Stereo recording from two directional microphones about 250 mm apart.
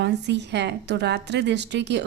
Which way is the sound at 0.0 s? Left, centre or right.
Right.